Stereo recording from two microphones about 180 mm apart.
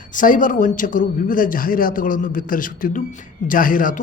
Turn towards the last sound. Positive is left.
turn(degrees=50)  # may be behind; listen again after turning